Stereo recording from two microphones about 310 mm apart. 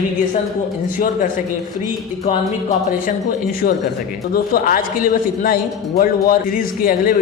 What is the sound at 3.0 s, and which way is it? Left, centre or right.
A man's voice, left.